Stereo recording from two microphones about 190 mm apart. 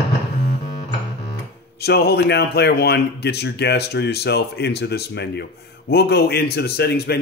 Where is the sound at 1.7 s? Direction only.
60° left (ahead or behind).